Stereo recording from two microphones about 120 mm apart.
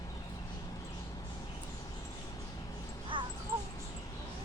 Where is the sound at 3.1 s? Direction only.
40° right (ahead or behind).